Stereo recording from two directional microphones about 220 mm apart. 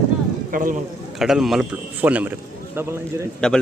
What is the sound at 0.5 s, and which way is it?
Speech, 40° right (ahead or behind).